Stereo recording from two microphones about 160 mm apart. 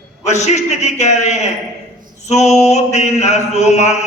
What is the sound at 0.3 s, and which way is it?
A man's voice, 45° left (ahead or behind).